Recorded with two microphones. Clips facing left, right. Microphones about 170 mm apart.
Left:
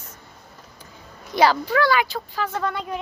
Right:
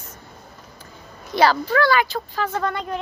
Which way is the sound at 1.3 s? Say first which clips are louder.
Right 1 dB; 15° left (ahead or behind).